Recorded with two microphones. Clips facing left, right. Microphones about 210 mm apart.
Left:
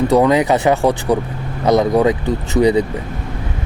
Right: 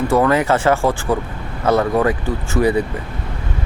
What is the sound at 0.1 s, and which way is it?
Speech, 15° left (ahead or behind).